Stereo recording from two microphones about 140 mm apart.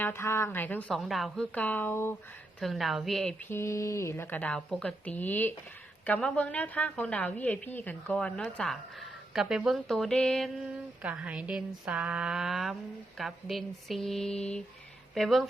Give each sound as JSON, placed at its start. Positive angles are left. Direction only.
{"t": 0.0, "sound": "a woman's voice", "side_deg": 15}
{"t": 0.9, "sound": "a woman's voice", "side_deg": 0}
{"t": 2.6, "sound": "speech", "side_deg": 0}
{"t": 3.5, "sound": "a woman's voice", "side_deg": 20}
{"t": 11.0, "sound": "a woman's voice", "side_deg": -10}